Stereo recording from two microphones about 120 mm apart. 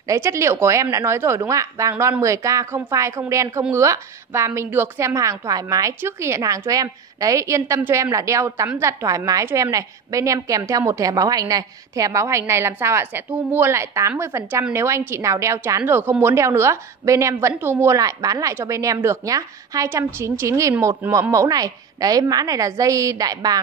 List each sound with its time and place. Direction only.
0.1 s a woman's voice: 25° right (ahead or behind)